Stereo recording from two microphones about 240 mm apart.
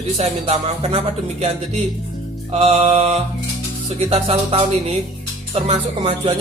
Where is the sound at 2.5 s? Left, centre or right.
Right.